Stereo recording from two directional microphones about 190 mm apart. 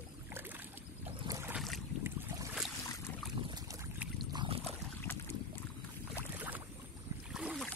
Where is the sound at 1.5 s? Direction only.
Centre (ahead or behind).